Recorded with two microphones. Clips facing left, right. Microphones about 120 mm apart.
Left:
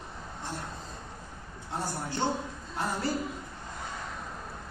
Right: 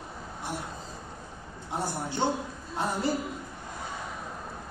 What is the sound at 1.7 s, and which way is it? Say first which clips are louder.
A man's voice: right 2 dB; 15° right (ahead or behind).